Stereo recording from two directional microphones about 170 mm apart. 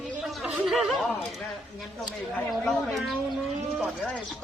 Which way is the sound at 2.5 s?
Centre (ahead or behind).